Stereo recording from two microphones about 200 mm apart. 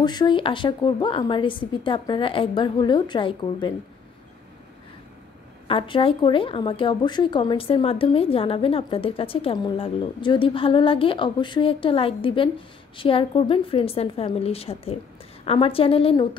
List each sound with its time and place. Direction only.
0.0 s speech: 20° left (ahead or behind)
5.7 s speech: 25° left (ahead or behind)